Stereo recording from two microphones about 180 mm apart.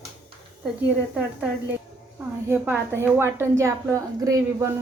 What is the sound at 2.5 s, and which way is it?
A woman's voice, 10° right (ahead or behind).